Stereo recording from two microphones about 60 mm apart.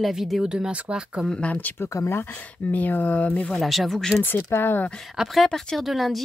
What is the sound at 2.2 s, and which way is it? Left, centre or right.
Speech, left.